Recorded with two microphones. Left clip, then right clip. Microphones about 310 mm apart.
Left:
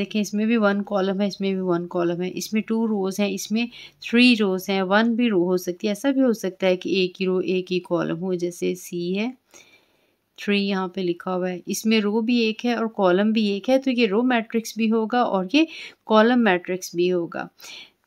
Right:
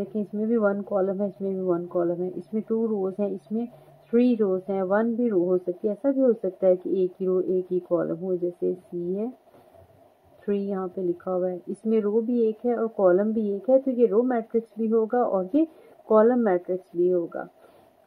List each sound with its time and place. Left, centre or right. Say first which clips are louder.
0.0 s speech: left 4 dB; left
10.4 s speech: left 4 dB; left